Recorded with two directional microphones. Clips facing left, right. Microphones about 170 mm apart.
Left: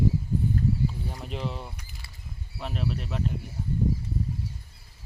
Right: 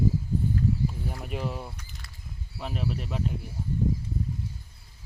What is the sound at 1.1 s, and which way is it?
Speech, 10° right (ahead or behind).